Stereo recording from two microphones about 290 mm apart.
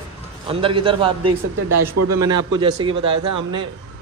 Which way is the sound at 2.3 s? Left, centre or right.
Centre.